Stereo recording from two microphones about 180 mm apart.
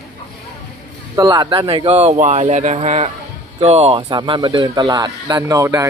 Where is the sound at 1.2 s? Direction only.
20° right (ahead or behind).